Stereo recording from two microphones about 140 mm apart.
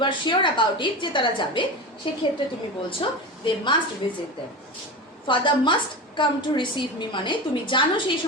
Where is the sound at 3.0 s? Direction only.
35° left (ahead or behind).